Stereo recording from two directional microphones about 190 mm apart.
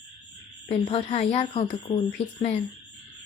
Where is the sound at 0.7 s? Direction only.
30° left (ahead or behind).